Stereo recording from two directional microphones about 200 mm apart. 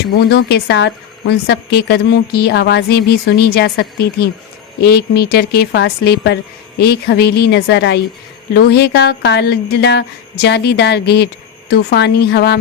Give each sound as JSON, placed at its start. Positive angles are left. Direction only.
{"t": 0.3, "sound": "speech", "side_deg": 55}